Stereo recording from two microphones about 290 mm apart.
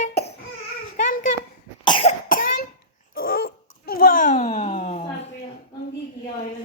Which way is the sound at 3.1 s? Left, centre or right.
Left.